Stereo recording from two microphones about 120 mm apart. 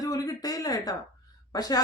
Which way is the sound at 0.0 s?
30° left (ahead or behind).